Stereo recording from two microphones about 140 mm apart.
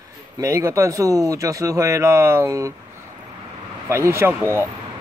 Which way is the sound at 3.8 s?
20° right (ahead or behind).